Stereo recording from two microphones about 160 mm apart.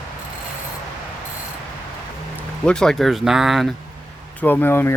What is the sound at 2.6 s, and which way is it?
Speech, 5° left (ahead or behind).